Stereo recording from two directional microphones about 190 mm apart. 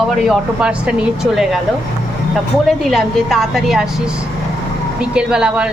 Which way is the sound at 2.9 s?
Centre (ahead or behind).